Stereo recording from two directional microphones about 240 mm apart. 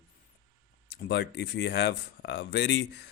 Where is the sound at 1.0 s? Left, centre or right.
Left.